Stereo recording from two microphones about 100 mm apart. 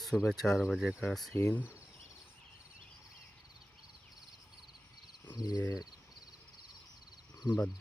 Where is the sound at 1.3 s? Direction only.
25° left (ahead or behind).